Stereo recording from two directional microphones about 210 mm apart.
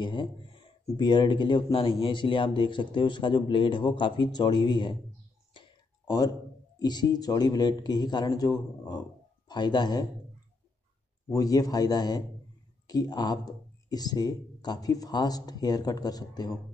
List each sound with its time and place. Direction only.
0.0 s speech: 20° left (ahead or behind)
5.5 s a sound: 20° left (ahead or behind)
6.8 s speech: 20° left (ahead or behind)
11.2 s a man's voice: 15° left (ahead or behind)